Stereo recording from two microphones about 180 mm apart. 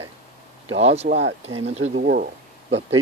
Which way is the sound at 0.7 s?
35° right (ahead or behind).